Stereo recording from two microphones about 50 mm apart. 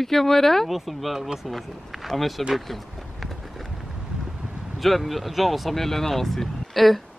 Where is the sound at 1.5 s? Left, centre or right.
Centre.